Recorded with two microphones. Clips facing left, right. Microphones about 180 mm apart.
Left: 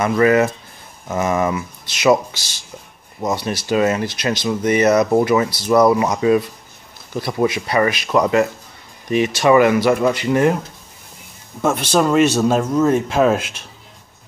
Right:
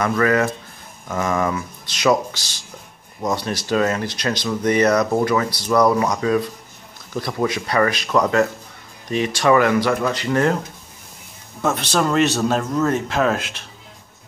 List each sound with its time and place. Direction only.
0.0 s speech: 15° left (ahead or behind)
11.6 s speech: 10° left (ahead or behind)